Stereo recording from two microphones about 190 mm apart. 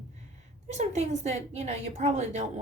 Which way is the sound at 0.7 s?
35° right (ahead or behind).